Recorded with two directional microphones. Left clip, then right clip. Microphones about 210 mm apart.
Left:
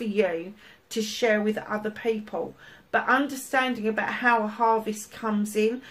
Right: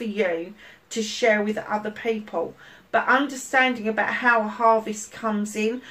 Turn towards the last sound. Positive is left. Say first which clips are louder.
# even
turn(degrees=40)  # may be behind; listen again after turning